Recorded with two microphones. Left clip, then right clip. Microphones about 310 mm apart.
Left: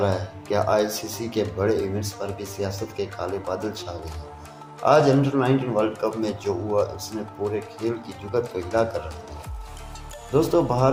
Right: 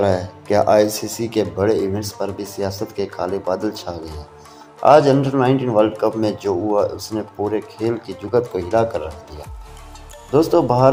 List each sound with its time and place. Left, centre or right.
0.0 s speech: right
10.3 s speech: right